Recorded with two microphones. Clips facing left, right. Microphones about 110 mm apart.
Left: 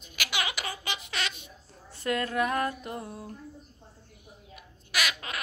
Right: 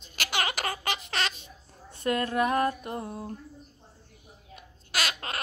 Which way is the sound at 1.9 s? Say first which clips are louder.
Right 2 dB; 25° right (ahead or behind).